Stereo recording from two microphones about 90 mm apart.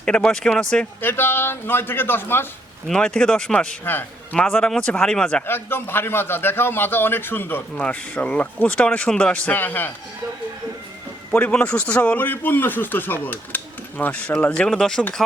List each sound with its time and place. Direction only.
0.0 s speech: 10° left (ahead or behind)
1.0 s a man's voice: 25° left (ahead or behind)
2.8 s speech: 5° left (ahead or behind)
3.8 s a man's voice: 20° left (ahead or behind)
4.4 s speech: 5° left (ahead or behind)
5.5 s a man's voice: 25° left (ahead or behind)
9.5 s a man's voice: 20° left (ahead or behind)
11.3 s a man's voice: 15° left (ahead or behind)